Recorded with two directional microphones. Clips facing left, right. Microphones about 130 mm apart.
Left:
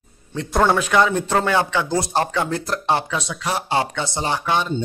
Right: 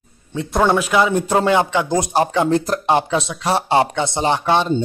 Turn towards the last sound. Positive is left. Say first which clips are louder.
# right 5 dB
turn(degrees=-25)  # may be behind; listen again after turning